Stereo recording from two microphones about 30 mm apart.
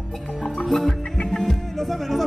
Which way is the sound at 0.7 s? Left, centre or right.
Left.